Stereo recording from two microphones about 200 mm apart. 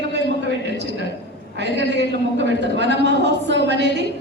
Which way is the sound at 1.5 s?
60° right (ahead or behind).